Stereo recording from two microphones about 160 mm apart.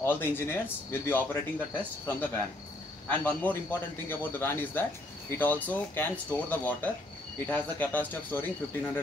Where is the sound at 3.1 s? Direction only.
10° left (ahead or behind).